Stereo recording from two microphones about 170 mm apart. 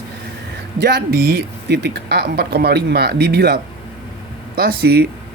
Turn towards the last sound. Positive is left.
turn(degrees=-65)  # may be behind; listen again after turning